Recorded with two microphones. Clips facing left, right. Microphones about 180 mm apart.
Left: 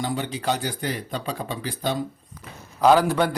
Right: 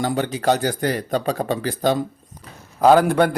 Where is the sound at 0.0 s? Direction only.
50° right (ahead or behind).